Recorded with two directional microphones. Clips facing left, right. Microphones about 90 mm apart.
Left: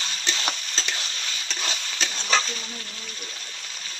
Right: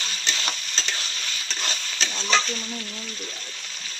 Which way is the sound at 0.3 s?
15° left (ahead or behind).